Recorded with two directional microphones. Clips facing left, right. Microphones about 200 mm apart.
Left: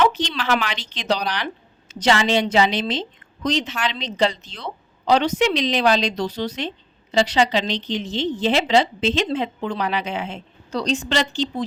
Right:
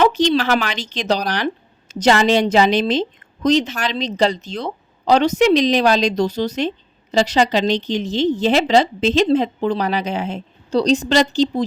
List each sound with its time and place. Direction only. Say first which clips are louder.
0.0 s a woman's voice: right 6 dB; 45° right (ahead or behind)